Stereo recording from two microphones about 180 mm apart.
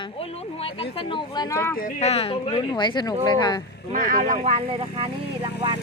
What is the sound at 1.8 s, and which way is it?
Speech, 40° left (ahead or behind).